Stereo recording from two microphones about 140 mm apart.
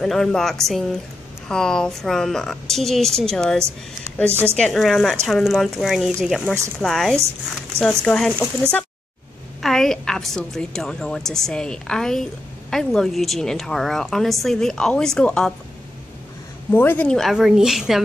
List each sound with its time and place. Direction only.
0.0 s a woman's voice: 5° left (ahead or behind)
4.3 s a woman's voice: 15° right (ahead or behind)
4.6 s a woman's voice: 5° left (ahead or behind)
9.6 s a woman's voice: centre (ahead or behind)
16.7 s a woman's voice: 15° left (ahead or behind); by 18.0 s 5° right (ahead or behind)